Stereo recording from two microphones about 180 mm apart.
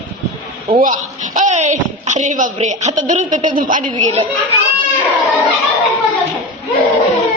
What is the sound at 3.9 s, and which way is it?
Speech, 35° right (ahead or behind).